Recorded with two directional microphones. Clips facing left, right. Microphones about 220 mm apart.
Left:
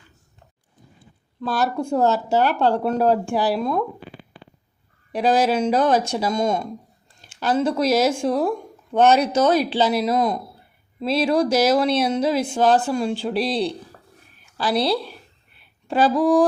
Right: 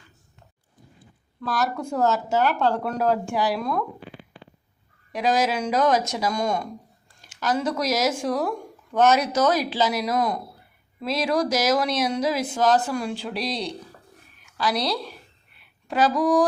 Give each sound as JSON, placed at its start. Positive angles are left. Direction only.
{"t": 1.4, "sound": "speech", "side_deg": 30}
{"t": 5.1, "sound": "a woman's voice", "side_deg": 30}